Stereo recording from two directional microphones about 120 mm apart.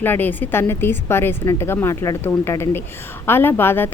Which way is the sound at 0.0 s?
15° left (ahead or behind).